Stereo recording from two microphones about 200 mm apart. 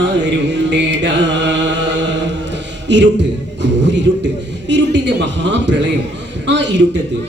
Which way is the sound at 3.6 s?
60° right (ahead or behind).